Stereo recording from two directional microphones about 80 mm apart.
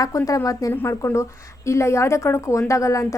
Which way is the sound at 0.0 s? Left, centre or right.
Left.